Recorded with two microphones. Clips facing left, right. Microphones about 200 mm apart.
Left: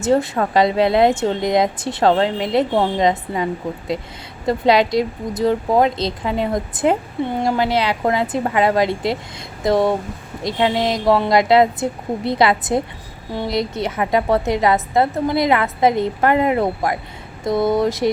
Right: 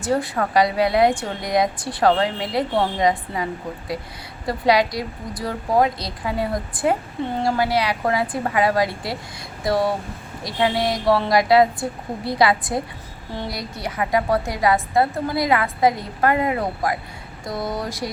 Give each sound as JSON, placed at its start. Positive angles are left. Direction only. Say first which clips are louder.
{"t": 0.0, "sound": "a woman's voice", "louder": "left 5 dB", "side_deg": 25}
{"t": 4.4, "sound": "a woman's voice", "louder": "left 3 dB", "side_deg": 25}
{"t": 10.4, "sound": "a woman's voice", "louder": "left 3 dB", "side_deg": 20}